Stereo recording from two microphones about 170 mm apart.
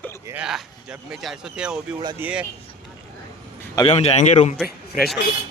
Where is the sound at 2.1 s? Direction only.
10° right (ahead or behind).